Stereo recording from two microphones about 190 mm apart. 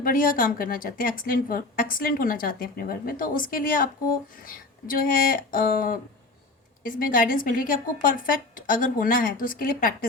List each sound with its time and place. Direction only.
0.0 s a woman's voice: 45° left (ahead or behind)